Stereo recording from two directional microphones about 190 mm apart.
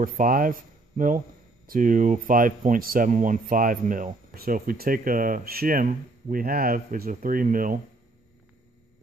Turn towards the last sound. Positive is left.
turn(degrees=-45)  # may be behind; listen again after turning